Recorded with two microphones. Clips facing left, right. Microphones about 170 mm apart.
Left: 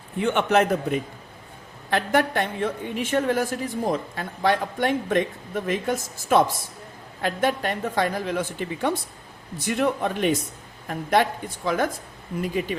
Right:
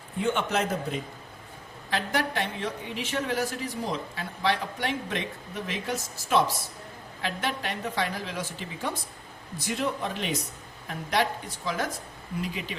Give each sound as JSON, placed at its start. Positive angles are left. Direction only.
{"t": 0.2, "sound": "a man's voice", "side_deg": 65}